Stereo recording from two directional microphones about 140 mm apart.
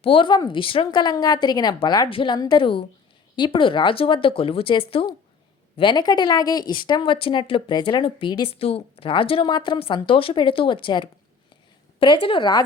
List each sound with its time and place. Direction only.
0.0 s speech: 35° left (ahead or behind)
5.8 s speech: 30° left (ahead or behind)